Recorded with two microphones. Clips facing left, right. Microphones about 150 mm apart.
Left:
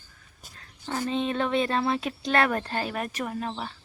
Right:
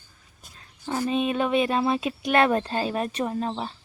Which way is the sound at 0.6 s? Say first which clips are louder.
Right 3 dB; 10° right (ahead or behind).